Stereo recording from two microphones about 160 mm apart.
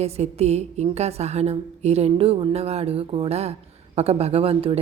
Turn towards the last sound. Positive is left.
turn(degrees=-40)  # may be behind; listen again after turning